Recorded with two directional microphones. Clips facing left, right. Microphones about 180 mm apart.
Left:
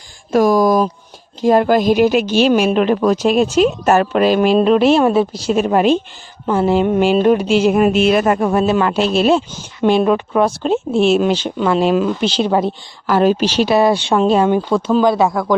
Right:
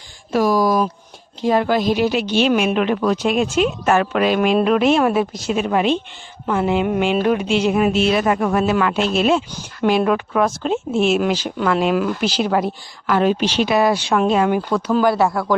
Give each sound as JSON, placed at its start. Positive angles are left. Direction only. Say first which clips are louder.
{"t": 0.3, "sound": "a woman's voice", "louder": "left 4 dB", "side_deg": 50}
{"t": 6.4, "sound": "a woman's voice", "louder": "left 4 dB", "side_deg": 30}
{"t": 8.4, "sound": "a woman's voice", "louder": "left 3 dB", "side_deg": 30}
{"t": 13.1, "sound": "a woman's voice", "louder": "left 3 dB", "side_deg": 40}